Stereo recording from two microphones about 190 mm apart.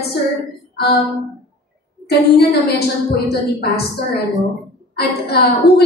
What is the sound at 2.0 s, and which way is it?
Speech, 55° left (ahead or behind).